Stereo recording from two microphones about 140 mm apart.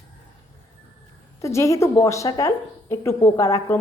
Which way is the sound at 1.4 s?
20° left (ahead or behind).